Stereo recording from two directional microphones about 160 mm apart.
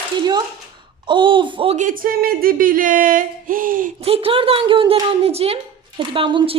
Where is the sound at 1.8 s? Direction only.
60° right (ahead or behind).